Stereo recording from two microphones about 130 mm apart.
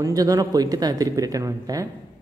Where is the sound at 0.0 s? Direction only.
25° right (ahead or behind).